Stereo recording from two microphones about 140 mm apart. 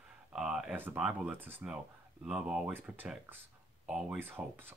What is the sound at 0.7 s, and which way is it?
Speech, 15° right (ahead or behind).